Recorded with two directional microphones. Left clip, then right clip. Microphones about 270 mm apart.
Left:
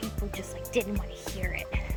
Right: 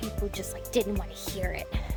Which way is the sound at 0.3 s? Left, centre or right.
Centre.